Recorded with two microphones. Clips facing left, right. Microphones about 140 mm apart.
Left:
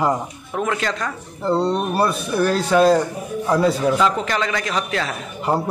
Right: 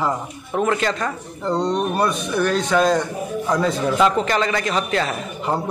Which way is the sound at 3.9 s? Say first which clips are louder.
Right 2 dB; centre (ahead or behind).